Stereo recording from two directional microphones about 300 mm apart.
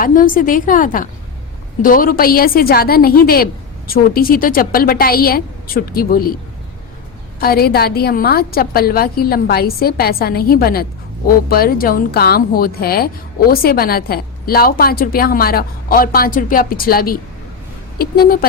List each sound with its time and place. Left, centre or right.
0.0 s a woman's voice: left
7.4 s a woman's voice: left